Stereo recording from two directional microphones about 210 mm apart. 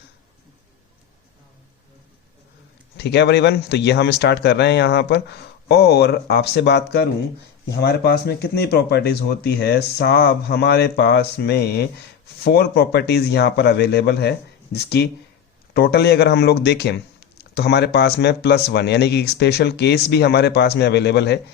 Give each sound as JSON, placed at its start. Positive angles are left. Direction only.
{"t": 3.0, "sound": "speech", "side_deg": 55}